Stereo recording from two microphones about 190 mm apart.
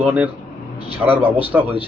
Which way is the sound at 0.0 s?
10° right (ahead or behind).